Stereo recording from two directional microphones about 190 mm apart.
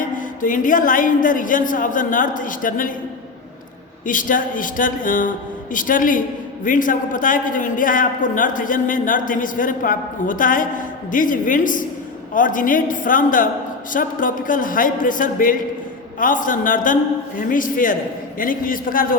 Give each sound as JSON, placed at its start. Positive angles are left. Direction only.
{"t": 0.2, "sound": "a man's voice", "side_deg": 45}
{"t": 4.0, "sound": "a man's voice", "side_deg": 45}